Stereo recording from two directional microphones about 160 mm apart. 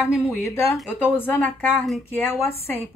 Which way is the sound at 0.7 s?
10° left (ahead or behind).